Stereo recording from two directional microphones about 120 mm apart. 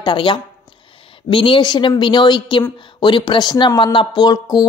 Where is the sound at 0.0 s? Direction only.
40° left (ahead or behind).